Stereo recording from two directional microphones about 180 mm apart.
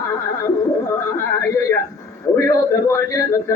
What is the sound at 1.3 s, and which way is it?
A man's voice, 15° left (ahead or behind).